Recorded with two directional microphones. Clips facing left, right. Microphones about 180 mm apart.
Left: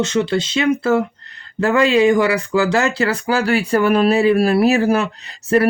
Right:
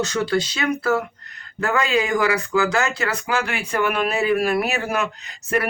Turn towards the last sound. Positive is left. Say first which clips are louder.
# left 8 dB
turn(degrees=30)  # may be behind; listen again after turning